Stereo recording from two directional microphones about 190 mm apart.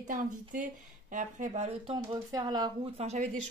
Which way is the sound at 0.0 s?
50° right (ahead or behind).